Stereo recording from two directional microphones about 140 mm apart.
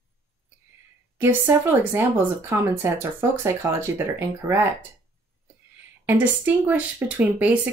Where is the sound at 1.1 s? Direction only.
15° right (ahead or behind).